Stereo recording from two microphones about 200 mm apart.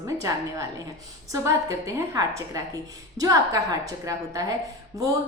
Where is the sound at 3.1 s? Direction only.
20° right (ahead or behind).